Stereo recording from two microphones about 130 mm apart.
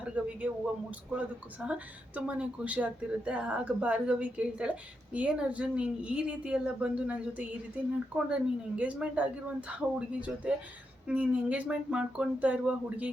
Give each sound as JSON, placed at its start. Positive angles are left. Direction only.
{"t": 0.0, "sound": "a woman's voice", "side_deg": -10}